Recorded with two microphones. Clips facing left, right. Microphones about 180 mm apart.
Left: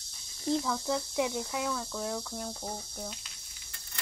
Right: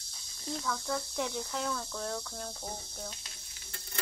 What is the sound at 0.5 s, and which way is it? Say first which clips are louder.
Speech: left 6 dB; 20° left (ahead or behind).